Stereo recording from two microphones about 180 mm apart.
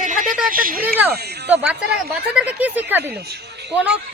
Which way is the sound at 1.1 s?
65° right (ahead or behind).